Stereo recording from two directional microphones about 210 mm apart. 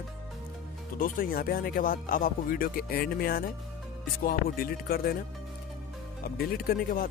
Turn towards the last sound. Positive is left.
turn(degrees=45)  # may be behind; listen again after turning